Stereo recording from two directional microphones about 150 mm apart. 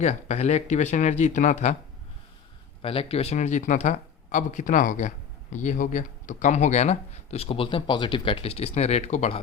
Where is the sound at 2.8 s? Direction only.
40° left (ahead or behind).